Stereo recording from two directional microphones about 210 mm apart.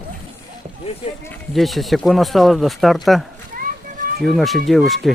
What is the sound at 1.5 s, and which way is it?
Speech, centre (ahead or behind).